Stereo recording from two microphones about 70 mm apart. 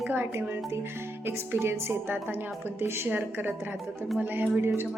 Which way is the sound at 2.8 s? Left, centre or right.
Right.